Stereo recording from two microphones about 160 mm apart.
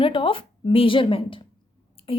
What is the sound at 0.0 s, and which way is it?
A woman's voice, 35° left (ahead or behind).